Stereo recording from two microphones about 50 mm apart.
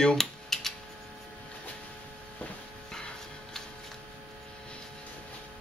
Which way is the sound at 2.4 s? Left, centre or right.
Left.